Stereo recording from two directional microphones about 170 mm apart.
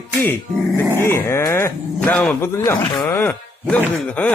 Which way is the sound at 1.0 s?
15° left (ahead or behind).